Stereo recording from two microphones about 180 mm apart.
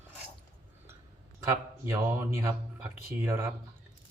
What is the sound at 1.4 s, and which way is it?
Speech, 15° right (ahead or behind).